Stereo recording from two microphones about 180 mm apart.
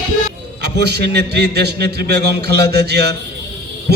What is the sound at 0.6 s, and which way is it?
A man's voice, 65° right (ahead or behind).